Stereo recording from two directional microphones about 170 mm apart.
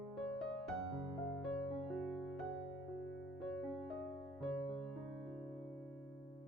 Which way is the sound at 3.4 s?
Centre (ahead or behind).